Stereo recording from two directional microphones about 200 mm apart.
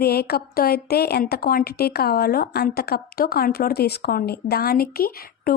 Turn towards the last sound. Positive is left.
turn(degrees=50)  # may be behind; listen again after turning